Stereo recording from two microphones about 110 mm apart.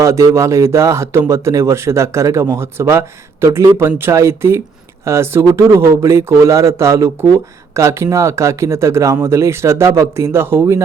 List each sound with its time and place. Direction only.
0.0 s speech: 25° right (ahead or behind)